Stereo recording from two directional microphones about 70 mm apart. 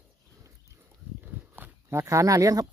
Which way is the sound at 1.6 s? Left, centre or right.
Right.